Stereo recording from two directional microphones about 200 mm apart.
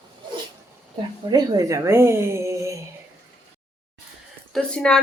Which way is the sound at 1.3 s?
20° right (ahead or behind).